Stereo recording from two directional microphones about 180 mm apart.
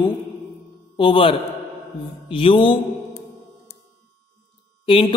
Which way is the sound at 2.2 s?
30° left (ahead or behind).